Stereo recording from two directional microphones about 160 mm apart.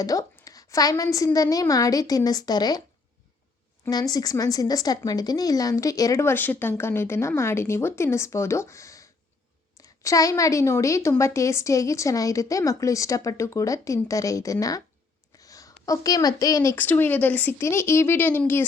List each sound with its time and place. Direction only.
0.0 s a woman's voice: 20° left (ahead or behind)
4.1 s a woman's voice: 25° left (ahead or behind)